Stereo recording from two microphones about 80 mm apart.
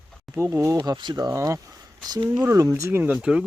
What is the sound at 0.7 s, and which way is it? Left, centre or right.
Speech, right.